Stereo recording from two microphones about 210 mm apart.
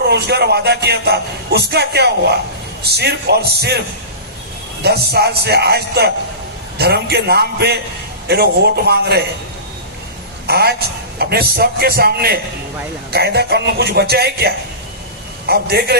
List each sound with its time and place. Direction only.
0.1 s a man's voice: 50° right (ahead or behind)
10.4 s a man's voice: 50° right (ahead or behind)